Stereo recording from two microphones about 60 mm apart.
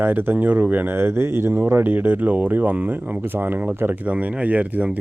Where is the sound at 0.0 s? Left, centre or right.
Right.